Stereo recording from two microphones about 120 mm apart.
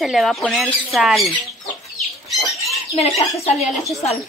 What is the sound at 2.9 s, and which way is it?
Speech, 60° left (ahead or behind).